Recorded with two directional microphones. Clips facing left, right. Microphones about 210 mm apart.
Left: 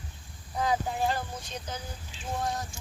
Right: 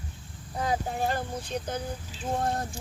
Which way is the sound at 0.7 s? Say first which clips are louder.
Even; 50° right (ahead or behind).